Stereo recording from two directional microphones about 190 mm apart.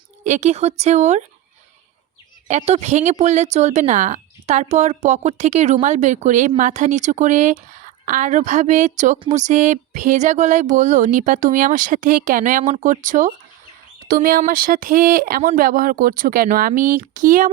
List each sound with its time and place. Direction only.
0.3 s speech: 35° right (ahead or behind)
2.5 s speech: 35° right (ahead or behind)
9.3 s a sound: 40° right (ahead or behind)